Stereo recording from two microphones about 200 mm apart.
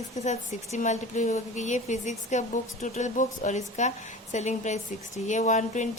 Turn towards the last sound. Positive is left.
turn(degrees=35)  # may be behind; listen again after turning